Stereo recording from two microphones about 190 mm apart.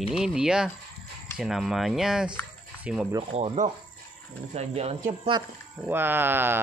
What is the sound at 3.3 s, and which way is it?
Speech, 35° right (ahead or behind).